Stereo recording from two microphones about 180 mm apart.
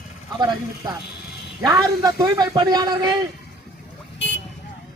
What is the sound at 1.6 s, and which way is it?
A man's voice, 20° right (ahead or behind).